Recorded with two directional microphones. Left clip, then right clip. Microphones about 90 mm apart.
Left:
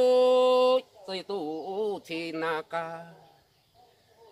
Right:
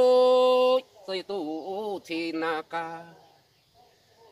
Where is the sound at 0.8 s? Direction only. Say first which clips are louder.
Right 2 dB; 35° left (ahead or behind).